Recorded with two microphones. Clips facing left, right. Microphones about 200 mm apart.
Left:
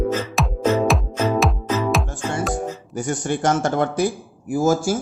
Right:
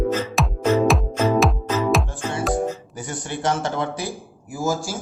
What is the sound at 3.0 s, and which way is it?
Speech, 50° left (ahead or behind).